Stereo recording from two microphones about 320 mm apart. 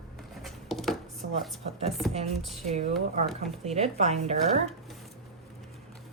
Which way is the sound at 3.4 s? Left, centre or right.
Centre.